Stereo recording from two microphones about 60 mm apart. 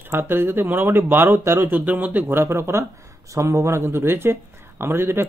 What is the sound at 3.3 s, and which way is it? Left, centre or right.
Speech, right.